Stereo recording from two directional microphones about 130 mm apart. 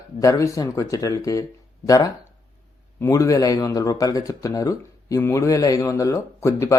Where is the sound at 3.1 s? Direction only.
25° left (ahead or behind).